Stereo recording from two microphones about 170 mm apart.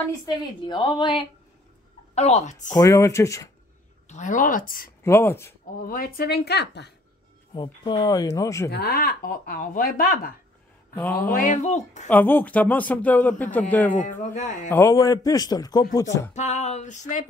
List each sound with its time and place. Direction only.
0.1 s a man's voice: 25° left (ahead or behind)
2.1 s speech: 40° left (ahead or behind)
2.7 s a man's voice: 20° left (ahead or behind)
4.1 s speech: 50° left (ahead or behind)
5.0 s speech: 15° left (ahead or behind)
5.8 s speech: 55° left (ahead or behind); by 6.9 s 75° left (ahead or behind)
7.5 s a man's voice: 25° left (ahead or behind)
8.6 s speech: 70° left (ahead or behind); by 12.1 s 45° left (ahead or behind)
12.1 s speech: 10° left (ahead or behind)
13.9 s speech: 50° left (ahead or behind)
14.7 s a man's voice: 15° left (ahead or behind)
16.3 s speech: 45° left (ahead or behind)